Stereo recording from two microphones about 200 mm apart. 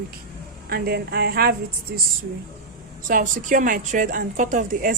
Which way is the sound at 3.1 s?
45° right (ahead or behind).